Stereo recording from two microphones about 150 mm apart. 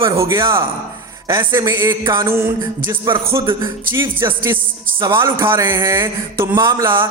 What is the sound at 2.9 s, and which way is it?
Speech, 35° right (ahead or behind).